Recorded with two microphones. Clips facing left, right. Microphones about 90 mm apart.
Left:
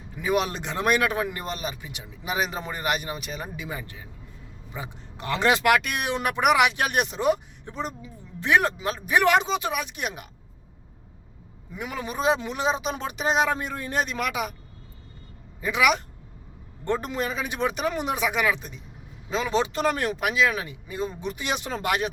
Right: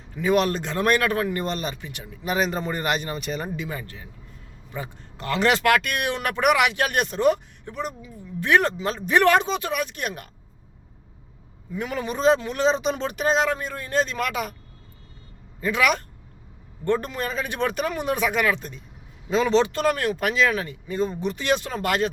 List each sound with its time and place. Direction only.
0.2 s speech: 15° left (ahead or behind)
3.7 s speech: 15° left (ahead or behind)
7.6 s speech: 25° left (ahead or behind)
8.4 s speech: 10° left (ahead or behind)
11.7 s speech: 10° left (ahead or behind)
15.6 s speech: 15° left (ahead or behind)
21.3 s speech: 15° left (ahead or behind)